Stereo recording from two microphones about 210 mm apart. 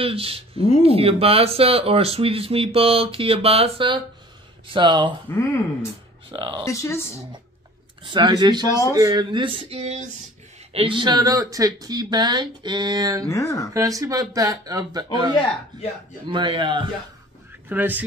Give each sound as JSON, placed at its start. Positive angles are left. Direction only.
{"t": 0.0, "sound": "speech", "side_deg": -25}
{"t": 5.3, "sound": "speech", "side_deg": 15}
{"t": 6.3, "sound": "speech", "side_deg": -20}
{"t": 6.6, "sound": "speech", "side_deg": 15}
{"t": 8.1, "sound": "speech", "side_deg": -20}
{"t": 13.2, "sound": "speech", "side_deg": 15}
{"t": 13.7, "sound": "speech", "side_deg": -15}
{"t": 16.3, "sound": "speech", "side_deg": -20}
{"t": 17.6, "sound": "speech", "side_deg": -10}